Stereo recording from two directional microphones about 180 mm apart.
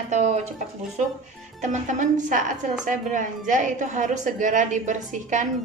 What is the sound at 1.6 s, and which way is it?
A woman's voice, 45° right (ahead or behind).